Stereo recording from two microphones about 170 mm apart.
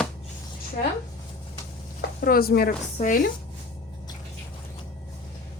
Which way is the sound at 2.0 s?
65° left (ahead or behind).